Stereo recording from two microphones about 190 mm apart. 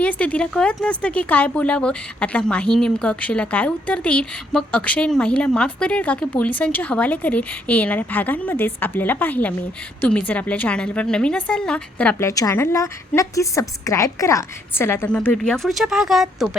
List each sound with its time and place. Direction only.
0.0 s speech: 10° left (ahead or behind)
12.3 s speech: 15° left (ahead or behind); by 16.5 s centre (ahead or behind)